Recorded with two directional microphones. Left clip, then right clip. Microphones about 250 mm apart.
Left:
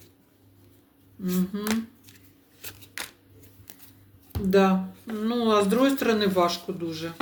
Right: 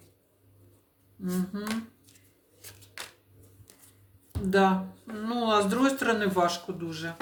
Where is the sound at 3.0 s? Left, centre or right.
Left.